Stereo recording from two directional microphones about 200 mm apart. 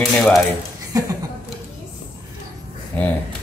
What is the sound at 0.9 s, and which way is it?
Speech, 15° right (ahead or behind).